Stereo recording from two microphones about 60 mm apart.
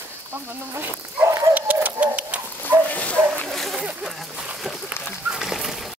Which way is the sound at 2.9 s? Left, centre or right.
Left.